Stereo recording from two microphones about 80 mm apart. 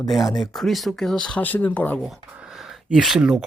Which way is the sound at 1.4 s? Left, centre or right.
Left.